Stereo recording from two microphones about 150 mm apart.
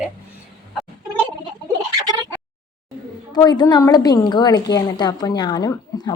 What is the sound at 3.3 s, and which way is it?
A woman's voice, 25° left (ahead or behind).